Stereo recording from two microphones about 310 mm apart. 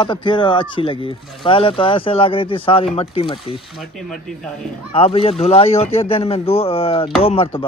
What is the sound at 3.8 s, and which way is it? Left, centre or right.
Speech, centre.